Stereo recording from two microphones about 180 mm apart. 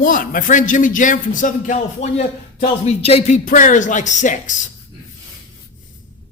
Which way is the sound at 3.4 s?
45° left (ahead or behind).